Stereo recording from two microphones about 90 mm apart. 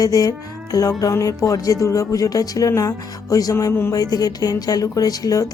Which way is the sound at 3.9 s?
45° left (ahead or behind).